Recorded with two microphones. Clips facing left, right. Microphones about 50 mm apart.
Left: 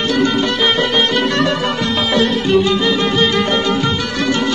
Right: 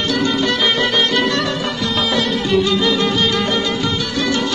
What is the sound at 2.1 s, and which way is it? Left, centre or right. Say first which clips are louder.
Music: left 5 dB; left.